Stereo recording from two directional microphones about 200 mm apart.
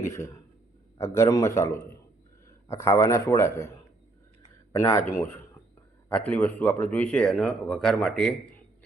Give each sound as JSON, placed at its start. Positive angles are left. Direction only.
{"t": 0.0, "sound": "speech", "side_deg": 15}
{"t": 4.7, "sound": "speech", "side_deg": 15}
{"t": 6.1, "sound": "speech", "side_deg": 5}